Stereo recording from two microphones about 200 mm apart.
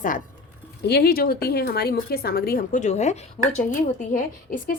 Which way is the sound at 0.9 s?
50° left (ahead or behind).